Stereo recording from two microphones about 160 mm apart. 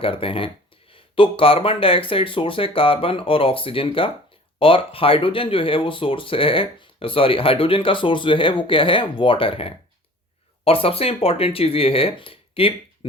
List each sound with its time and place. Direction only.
0.0 s speech: 35° left (ahead or behind)